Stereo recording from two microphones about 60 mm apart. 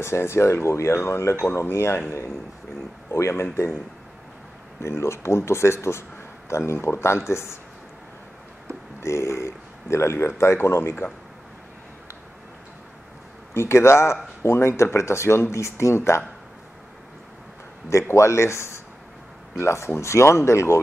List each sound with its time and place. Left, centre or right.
0.0 s a man's voice: left
4.8 s a man's voice: left
9.0 s a man's voice: left
13.5 s a man's voice: left
17.8 s a man's voice: left